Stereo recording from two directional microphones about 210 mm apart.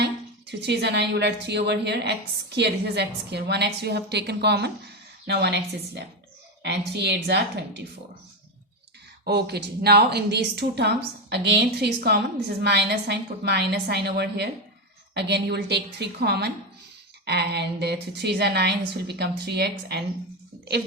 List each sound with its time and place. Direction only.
0.0 s speech: 55° right (ahead or behind)
9.2 s speech: 50° right (ahead or behind)